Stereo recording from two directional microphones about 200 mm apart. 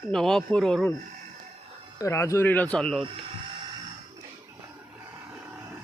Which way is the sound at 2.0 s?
15° left (ahead or behind).